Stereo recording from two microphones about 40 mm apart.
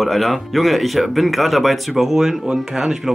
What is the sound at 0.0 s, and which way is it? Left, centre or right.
Speech, centre.